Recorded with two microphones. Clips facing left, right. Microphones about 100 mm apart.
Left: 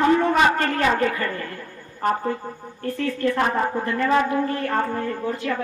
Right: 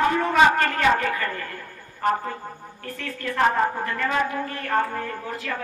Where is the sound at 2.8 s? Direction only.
35° left (ahead or behind).